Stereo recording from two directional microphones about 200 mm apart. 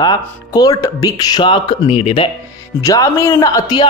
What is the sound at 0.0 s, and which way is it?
Speech, 20° left (ahead or behind).